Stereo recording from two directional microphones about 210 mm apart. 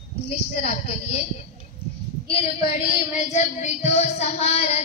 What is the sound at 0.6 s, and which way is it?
Speech, 30° left (ahead or behind).